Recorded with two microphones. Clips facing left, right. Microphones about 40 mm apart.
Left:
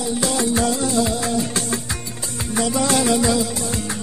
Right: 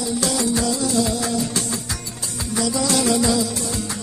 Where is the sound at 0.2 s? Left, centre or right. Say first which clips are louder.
Left 2 dB; left.